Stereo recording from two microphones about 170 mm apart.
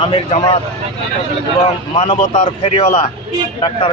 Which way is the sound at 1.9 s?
45° left (ahead or behind).